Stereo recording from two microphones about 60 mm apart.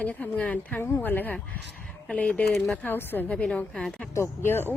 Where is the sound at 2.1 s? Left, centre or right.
Centre.